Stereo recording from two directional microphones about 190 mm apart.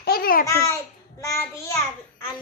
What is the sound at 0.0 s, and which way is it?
Babbling, 50° left (ahead or behind).